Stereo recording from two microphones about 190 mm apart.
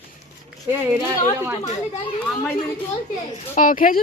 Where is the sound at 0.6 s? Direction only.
15° right (ahead or behind).